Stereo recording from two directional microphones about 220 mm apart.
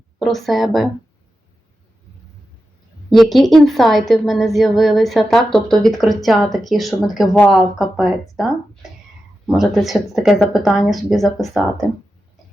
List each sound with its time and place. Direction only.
0.2 s a woman's voice: centre (ahead or behind)
3.1 s a woman's voice: centre (ahead or behind)